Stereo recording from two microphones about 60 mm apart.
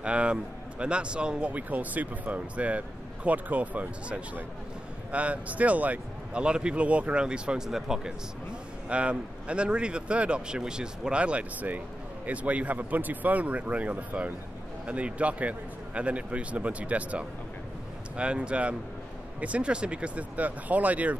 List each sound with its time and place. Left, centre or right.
0.0 s speech: centre
8.8 s speech: centre